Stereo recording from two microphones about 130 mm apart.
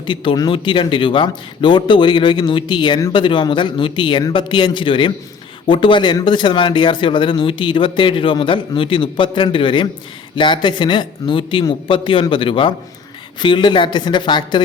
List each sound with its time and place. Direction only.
0.0 s speech: 40° left (ahead or behind)